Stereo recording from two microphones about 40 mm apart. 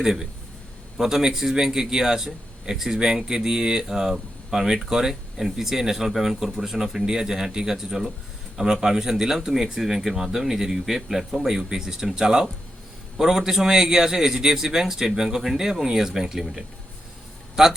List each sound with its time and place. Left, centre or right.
0.0 s speech: centre